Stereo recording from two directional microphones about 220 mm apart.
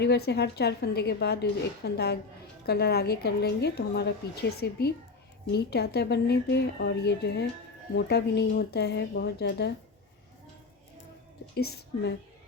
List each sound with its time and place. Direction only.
0.0 s a woman's voice: 50° left (ahead or behind)
11.5 s a woman's voice: 45° left (ahead or behind)